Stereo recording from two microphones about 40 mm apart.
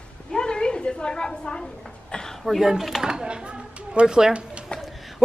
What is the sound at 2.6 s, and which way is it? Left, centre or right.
Speech, centre.